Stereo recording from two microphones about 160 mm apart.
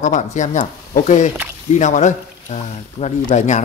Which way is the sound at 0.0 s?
50° left (ahead or behind).